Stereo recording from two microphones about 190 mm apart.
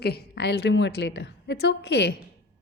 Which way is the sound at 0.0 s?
60° left (ahead or behind).